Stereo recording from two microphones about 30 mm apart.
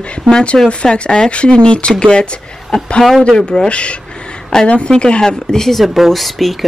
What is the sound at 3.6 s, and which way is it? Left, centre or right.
Speech, left.